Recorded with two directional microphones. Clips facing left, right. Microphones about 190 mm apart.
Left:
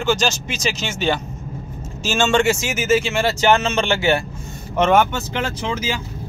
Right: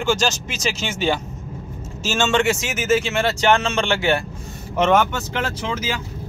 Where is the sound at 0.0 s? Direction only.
5° right (ahead or behind).